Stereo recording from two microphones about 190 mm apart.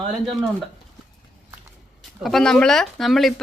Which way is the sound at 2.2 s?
Centre (ahead or behind).